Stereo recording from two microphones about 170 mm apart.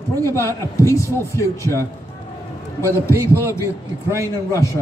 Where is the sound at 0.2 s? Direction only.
15° left (ahead or behind).